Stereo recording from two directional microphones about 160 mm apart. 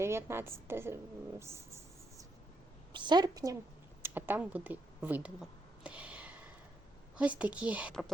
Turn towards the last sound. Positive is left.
turn(degrees=-10)  # may be behind; listen again after turning